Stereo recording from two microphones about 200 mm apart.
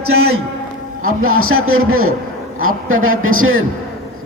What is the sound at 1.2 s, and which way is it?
A man's voice, 90° right.